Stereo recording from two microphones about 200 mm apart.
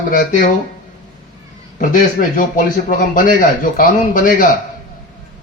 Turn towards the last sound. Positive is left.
turn(degrees=40)  # may be behind; listen again after turning